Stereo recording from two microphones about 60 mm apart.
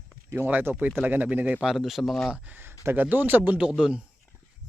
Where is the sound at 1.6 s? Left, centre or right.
Centre.